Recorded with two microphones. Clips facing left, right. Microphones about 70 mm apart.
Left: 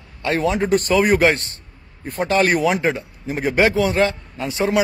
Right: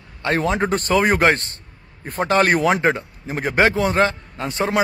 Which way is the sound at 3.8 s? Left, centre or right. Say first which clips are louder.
Even; right.